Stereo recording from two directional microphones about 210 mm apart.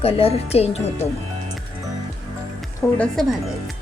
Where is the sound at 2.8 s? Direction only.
5° left (ahead or behind).